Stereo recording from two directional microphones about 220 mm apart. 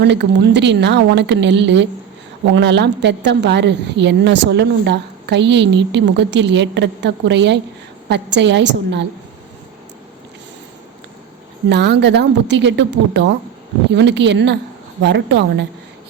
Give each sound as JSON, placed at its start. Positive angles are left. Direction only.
{"t": 0.0, "sound": "a woman's voice", "side_deg": -50}
{"t": 11.7, "sound": "a woman's voice", "side_deg": -50}